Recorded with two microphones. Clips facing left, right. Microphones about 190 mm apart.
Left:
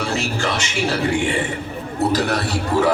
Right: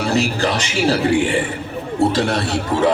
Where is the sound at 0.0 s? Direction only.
35° right (ahead or behind).